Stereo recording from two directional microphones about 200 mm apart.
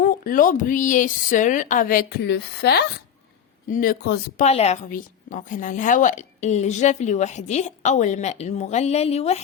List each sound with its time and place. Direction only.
0.0 s a woman's voice: 40° left (ahead or behind)
3.7 s speech: 45° left (ahead or behind)
4.4 s a woman's voice: 35° left (ahead or behind)